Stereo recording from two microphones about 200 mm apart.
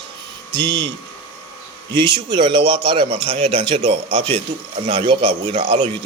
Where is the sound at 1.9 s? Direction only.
25° right (ahead or behind).